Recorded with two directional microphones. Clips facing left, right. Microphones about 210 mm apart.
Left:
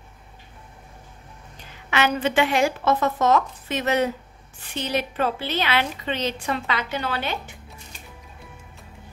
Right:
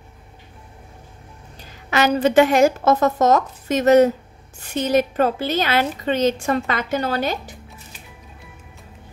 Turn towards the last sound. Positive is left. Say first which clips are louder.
# right 6 dB
turn(degrees=-40)  # may be behind; listen again after turning